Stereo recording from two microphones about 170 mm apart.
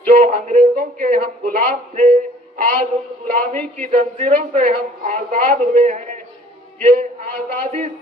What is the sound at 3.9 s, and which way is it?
A woman's voice, 40° right (ahead or behind).